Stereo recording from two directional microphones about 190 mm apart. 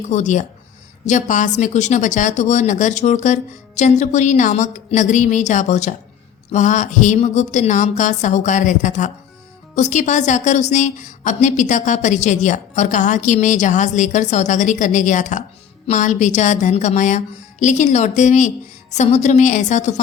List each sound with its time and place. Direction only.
0.1 s a woman's voice: 40° left (ahead or behind)